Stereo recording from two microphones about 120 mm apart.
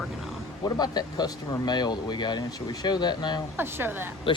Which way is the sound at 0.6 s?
35° left (ahead or behind).